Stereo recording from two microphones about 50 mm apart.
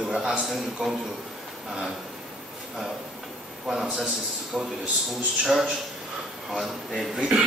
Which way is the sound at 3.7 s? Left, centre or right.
Centre.